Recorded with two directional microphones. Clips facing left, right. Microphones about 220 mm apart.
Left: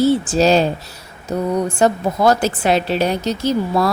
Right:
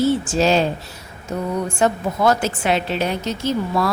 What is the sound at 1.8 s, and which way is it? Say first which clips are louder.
A woman's voice: left 2 dB; 35° left (ahead or behind).